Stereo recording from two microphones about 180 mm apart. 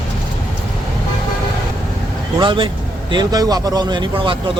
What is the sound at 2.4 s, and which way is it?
A man's voice, 25° right (ahead or behind).